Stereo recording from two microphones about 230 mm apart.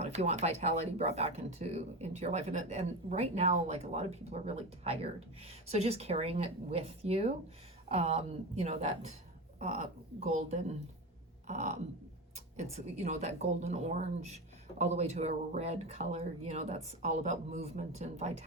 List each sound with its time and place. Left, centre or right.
0.0 s speech: right
10.2 s speech: right
11.4 s a sound: right
12.5 s speech: right
15.2 s speech: right